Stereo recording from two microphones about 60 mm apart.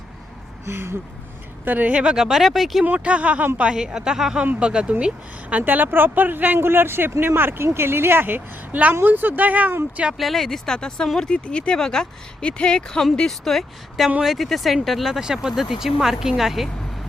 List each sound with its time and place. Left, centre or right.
0.6 s speech: right
1.6 s speech: right
2.0 s speech: centre
2.8 s speech: right
3.8 s speech: centre; by 9.7 s right
10.2 s speech: centre